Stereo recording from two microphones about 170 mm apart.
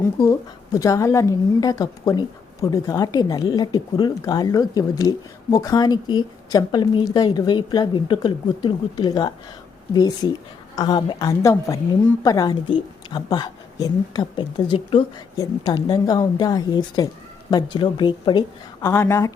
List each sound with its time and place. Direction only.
0.3 s a woman's voice: 20° left (ahead or behind)
18.9 s speech: 15° left (ahead or behind)